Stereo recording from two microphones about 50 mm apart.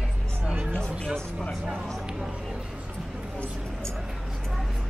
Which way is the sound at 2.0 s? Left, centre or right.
Centre.